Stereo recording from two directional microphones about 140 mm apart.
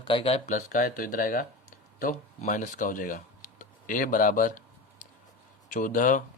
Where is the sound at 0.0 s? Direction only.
35° left (ahead or behind); by 1.5 s 90° left.